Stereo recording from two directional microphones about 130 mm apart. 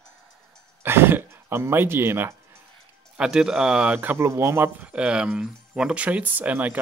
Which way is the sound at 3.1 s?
5° right (ahead or behind).